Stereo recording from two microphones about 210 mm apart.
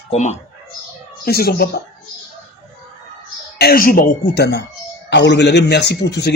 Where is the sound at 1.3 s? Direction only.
45° left (ahead or behind).